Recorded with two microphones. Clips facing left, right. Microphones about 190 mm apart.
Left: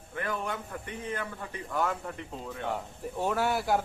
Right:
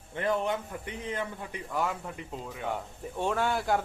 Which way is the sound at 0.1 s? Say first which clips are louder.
Right 5 dB; 25° right (ahead or behind).